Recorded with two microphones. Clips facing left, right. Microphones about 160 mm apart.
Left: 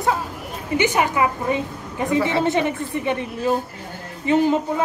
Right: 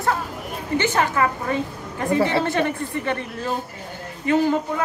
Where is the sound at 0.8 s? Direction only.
15° left (ahead or behind).